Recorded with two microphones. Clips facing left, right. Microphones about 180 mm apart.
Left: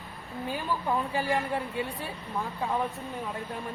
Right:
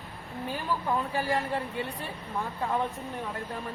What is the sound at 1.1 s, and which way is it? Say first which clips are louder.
Speech: even; 15° left (ahead or behind).